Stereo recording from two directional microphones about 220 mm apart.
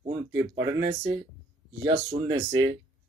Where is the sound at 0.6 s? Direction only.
20° right (ahead or behind).